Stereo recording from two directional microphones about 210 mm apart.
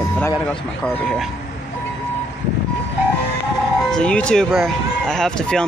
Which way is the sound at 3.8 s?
5° left (ahead or behind).